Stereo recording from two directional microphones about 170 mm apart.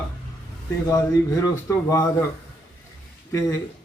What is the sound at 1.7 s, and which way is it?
Speech, 20° left (ahead or behind).